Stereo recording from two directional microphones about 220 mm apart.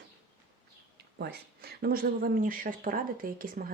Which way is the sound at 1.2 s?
45° right (ahead or behind).